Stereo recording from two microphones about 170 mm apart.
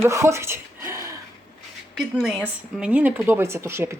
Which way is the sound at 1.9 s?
Centre (ahead or behind).